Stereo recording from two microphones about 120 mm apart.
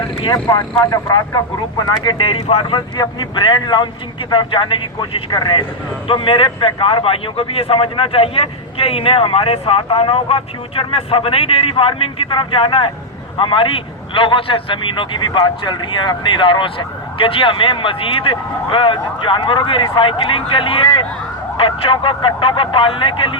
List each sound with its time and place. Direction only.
0.9 s a man's voice: 30° left (ahead or behind); by 2.7 s 55° left (ahead or behind)
2.7 s a man's voice: 40° left (ahead or behind)